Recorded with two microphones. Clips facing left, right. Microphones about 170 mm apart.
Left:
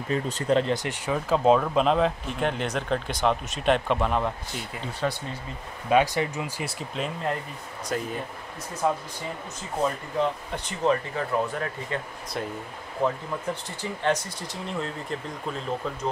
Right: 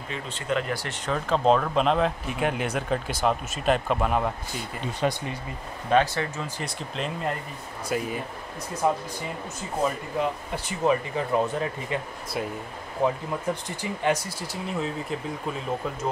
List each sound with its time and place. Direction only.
0.1 s speech: 40° left (ahead or behind)
0.7 s speech: 15° left (ahead or behind); by 4.3 s 5° right (ahead or behind)
5.0 s speech: 15° right (ahead or behind)
5.9 s speech: 10° left (ahead or behind)
7.9 s speech: 10° right (ahead or behind)
13.0 s speech: 15° right (ahead or behind)